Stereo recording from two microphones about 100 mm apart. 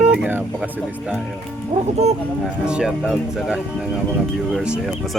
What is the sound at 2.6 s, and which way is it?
Speech, 5° right (ahead or behind).